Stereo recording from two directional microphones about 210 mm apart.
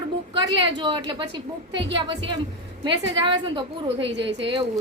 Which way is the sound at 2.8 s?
25° right (ahead or behind).